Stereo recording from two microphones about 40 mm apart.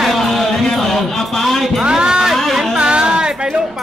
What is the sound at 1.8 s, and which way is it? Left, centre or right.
Music, right.